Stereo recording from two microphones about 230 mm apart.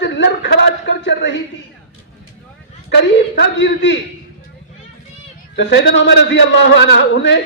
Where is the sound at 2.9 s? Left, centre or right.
Left.